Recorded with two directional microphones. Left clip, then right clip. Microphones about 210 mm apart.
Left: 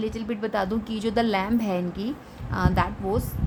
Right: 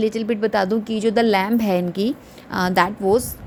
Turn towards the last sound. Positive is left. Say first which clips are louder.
# right 9 dB
turn(degrees=-25)  # may be behind; listen again after turning